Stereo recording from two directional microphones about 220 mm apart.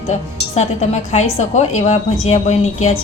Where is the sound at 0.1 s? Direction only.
30° left (ahead or behind).